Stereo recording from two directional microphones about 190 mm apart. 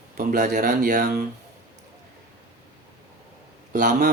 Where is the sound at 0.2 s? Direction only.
45° right (ahead or behind).